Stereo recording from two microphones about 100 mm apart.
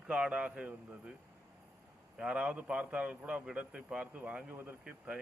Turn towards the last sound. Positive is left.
turn(degrees=-20)  # may be behind; listen again after turning